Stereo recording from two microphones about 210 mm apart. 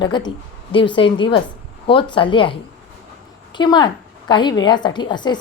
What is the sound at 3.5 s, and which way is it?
A woman's voice, 20° left (ahead or behind).